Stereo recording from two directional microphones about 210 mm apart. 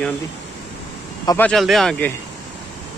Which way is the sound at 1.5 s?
Centre (ahead or behind).